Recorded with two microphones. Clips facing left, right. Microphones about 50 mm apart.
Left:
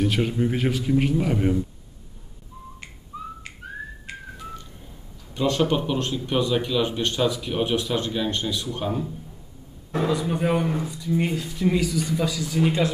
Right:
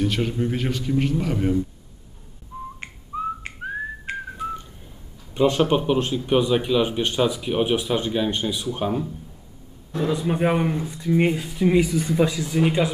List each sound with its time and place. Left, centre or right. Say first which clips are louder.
0.0 s speech: left 1 dB; centre
2.5 s whistling: right 7 dB; right
5.3 s speech: right 3 dB; right
10.2 s speech: right 2 dB; right